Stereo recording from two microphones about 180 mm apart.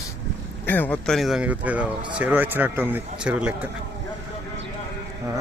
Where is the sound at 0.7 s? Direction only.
10° left (ahead or behind); by 3.7 s 10° right (ahead or behind).